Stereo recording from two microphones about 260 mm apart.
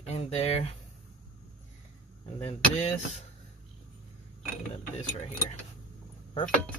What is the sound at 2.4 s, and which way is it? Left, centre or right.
Speech, left.